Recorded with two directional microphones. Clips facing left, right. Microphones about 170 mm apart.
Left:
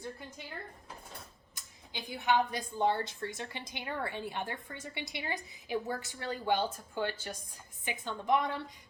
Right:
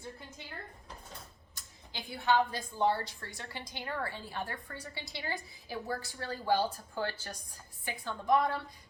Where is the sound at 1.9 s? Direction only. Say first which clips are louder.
Right 1 dB; 20° left (ahead or behind).